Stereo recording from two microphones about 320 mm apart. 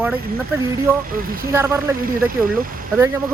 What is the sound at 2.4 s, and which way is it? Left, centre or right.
Speech, right.